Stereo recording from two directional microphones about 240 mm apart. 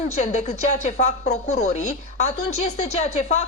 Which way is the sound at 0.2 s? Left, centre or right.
Left.